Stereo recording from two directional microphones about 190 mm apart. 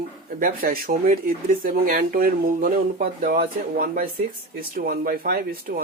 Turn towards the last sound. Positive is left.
turn(degrees=-50)  # may be behind; listen again after turning